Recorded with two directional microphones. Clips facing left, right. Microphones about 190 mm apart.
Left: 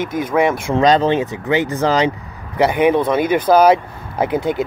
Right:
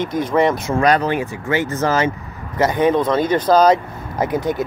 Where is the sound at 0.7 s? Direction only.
20° left (ahead or behind).